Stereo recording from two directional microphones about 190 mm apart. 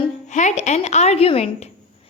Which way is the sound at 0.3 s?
40° left (ahead or behind).